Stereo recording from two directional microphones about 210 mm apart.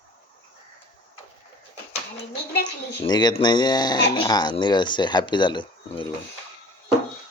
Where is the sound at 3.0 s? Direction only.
20° left (ahead or behind).